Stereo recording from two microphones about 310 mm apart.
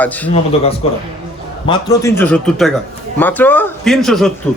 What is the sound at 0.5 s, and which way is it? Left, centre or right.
A man's voice, centre.